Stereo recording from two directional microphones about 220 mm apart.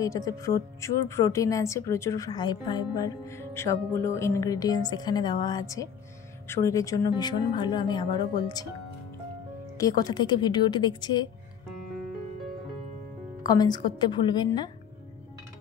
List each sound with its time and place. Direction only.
0.0 s a woman's voice: 15° left (ahead or behind)
9.8 s speech: 15° left (ahead or behind)
13.5 s speech: 20° left (ahead or behind)